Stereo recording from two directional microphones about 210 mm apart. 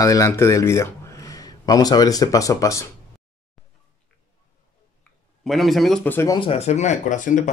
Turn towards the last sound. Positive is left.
turn(degrees=35)  # may be behind; listen again after turning